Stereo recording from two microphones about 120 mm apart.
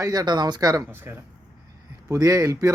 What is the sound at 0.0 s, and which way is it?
Speech, 30° right (ahead or behind).